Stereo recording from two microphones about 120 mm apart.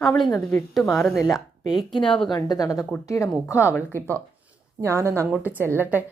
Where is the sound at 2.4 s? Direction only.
30° left (ahead or behind).